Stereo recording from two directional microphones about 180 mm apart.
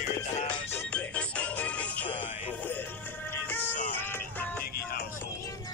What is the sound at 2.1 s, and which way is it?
Music, 30° left (ahead or behind).